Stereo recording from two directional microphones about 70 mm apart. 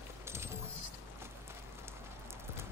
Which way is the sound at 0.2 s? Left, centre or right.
Right.